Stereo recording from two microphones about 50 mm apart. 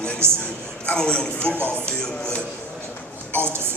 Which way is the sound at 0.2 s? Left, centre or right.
Right.